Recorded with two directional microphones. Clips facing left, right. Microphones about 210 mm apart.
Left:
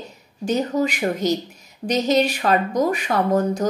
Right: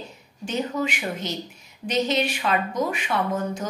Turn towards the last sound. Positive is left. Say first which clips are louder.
# left 6 dB
turn(degrees=40)  # may be behind; listen again after turning